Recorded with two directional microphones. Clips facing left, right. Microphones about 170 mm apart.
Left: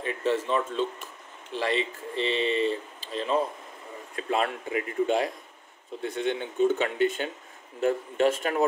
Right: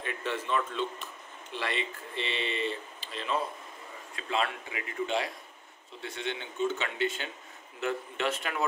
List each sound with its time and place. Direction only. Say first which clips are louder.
0.0 s speech: left 7 dB; 35° left (ahead or behind)